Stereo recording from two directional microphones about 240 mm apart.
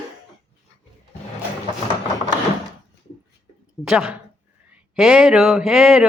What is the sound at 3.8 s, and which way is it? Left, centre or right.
Speech, centre.